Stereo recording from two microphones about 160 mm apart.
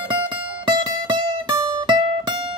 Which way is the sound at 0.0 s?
30° right (ahead or behind).